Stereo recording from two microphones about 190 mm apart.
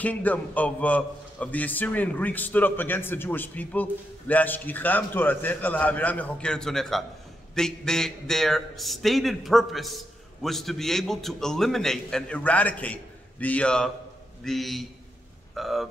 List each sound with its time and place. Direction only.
0.0 s a man's voice: 10° left (ahead or behind)